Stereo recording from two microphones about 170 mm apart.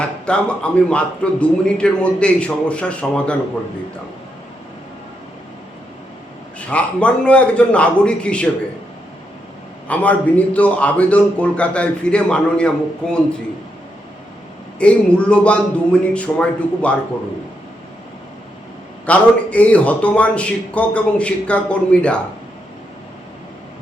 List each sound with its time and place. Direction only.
0.0 s speech: 5° left (ahead or behind)
6.6 s speech: 5° left (ahead or behind)
9.9 s speech: 10° left (ahead or behind)
14.8 s speech: 5° left (ahead or behind)
19.0 s speech: 10° left (ahead or behind)